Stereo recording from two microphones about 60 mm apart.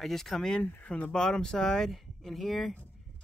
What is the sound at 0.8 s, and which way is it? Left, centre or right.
Speech, left.